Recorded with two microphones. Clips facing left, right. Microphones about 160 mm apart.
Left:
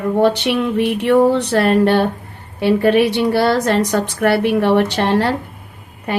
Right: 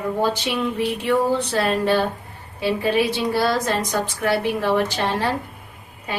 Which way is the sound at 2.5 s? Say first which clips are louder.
Left 7 dB; 60° left (ahead or behind).